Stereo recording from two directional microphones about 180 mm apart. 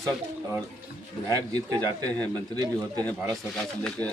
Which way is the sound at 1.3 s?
20° right (ahead or behind).